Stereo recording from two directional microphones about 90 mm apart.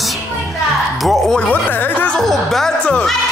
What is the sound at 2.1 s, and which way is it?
Speech, 5° left (ahead or behind).